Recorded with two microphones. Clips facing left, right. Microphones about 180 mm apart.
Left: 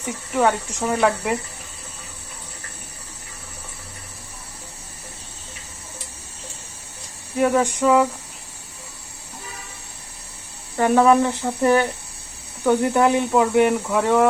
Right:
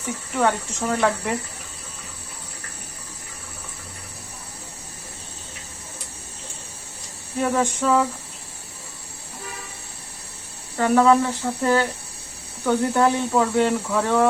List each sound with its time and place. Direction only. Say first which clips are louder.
0.3 s speech: left 2 dB; 10° left (ahead or behind)
7.3 s speech: left 3 dB; 15° left (ahead or behind)
10.8 s speech: left 1 dB; 20° left (ahead or behind)